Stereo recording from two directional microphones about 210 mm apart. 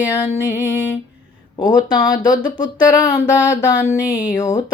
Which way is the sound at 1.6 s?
20° left (ahead or behind).